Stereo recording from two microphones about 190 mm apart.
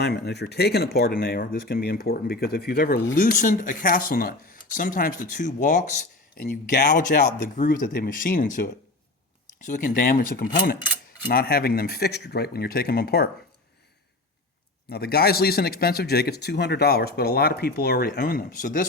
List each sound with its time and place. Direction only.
0.0 s a man's voice: 60° left (ahead or behind)
14.8 s a man's voice: 55° left (ahead or behind)